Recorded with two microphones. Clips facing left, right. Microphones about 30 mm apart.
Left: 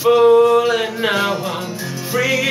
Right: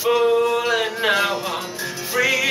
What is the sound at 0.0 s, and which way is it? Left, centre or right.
Music, centre.